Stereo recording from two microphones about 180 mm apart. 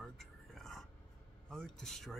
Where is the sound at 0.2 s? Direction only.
Centre (ahead or behind).